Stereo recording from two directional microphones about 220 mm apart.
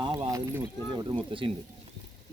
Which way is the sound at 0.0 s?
20° right (ahead or behind).